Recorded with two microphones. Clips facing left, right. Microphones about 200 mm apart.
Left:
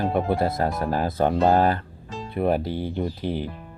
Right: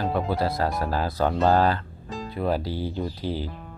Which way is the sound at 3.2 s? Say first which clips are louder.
Left 1 dB; 20° left (ahead or behind).